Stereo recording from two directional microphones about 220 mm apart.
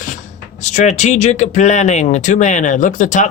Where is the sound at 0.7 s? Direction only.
30° left (ahead or behind).